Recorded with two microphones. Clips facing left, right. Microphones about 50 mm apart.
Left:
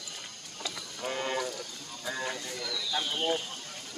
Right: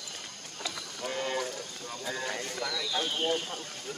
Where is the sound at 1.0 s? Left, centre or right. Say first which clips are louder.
Left 1 dB; centre.